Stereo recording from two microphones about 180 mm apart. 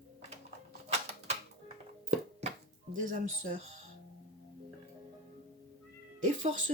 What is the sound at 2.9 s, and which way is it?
Speech, 45° right (ahead or behind).